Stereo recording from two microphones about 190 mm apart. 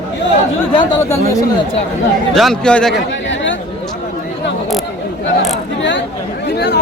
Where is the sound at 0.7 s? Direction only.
15° left (ahead or behind).